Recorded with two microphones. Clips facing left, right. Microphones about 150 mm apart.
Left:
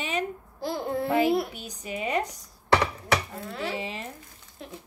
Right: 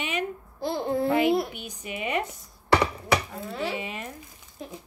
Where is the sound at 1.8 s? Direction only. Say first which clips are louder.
Left 1 dB; 35° left (ahead or behind).